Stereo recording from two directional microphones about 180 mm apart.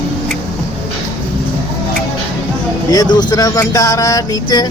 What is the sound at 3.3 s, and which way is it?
Speech, 20° left (ahead or behind).